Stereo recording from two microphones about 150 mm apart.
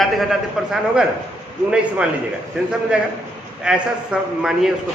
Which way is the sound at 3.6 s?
5° right (ahead or behind).